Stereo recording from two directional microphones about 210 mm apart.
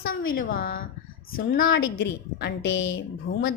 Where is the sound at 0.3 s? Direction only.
40° left (ahead or behind).